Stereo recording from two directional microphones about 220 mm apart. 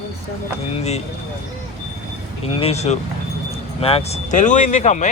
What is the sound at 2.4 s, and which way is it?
Speech, 25° left (ahead or behind).